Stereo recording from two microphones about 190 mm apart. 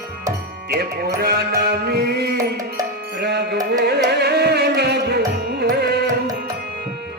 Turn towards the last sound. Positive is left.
turn(degrees=-60)  # may be behind; listen again after turning